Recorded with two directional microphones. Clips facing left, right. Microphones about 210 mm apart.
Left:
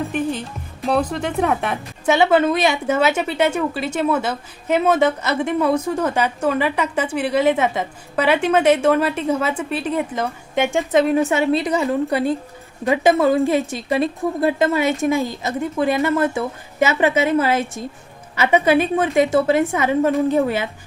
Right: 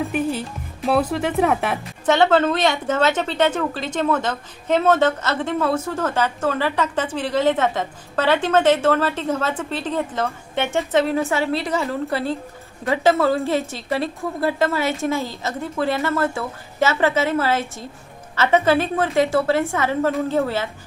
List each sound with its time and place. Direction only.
0.0 s music: 5° right (ahead or behind)
2.0 s speech: 10° left (ahead or behind)